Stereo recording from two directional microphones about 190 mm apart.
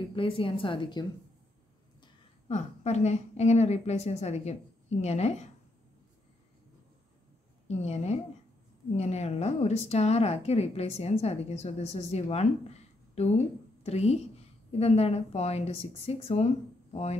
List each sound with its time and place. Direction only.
0.1 s a woman's voice: 30° left (ahead or behind)
2.4 s speech: 35° left (ahead or behind)
7.6 s speech: 35° left (ahead or behind)